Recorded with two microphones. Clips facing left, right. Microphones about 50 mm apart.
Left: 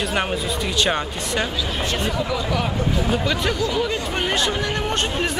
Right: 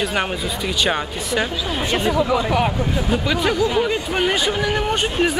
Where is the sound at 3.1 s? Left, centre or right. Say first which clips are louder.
Right 2 dB; centre.